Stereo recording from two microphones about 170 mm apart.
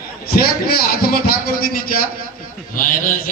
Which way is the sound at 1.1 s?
60° left (ahead or behind).